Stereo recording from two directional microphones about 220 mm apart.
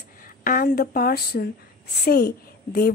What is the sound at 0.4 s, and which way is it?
A woman's voice, 40° left (ahead or behind).